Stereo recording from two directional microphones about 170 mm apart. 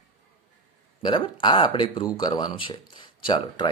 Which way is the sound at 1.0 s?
30° left (ahead or behind).